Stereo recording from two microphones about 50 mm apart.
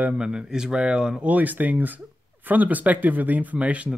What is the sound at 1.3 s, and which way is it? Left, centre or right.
Speech, right.